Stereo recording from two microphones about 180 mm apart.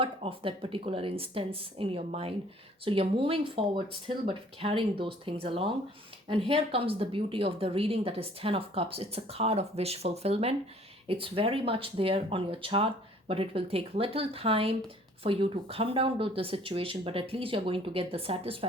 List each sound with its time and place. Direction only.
0.0 s a woman's voice: 30° right (ahead or behind)